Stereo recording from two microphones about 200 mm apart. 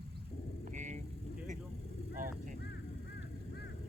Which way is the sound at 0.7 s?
40° right (ahead or behind).